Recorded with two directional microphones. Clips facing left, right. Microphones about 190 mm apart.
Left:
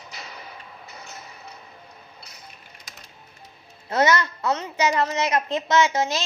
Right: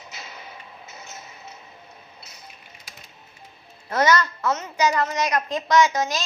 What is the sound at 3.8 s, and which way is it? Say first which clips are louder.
A child's voice: even; 25° left (ahead or behind).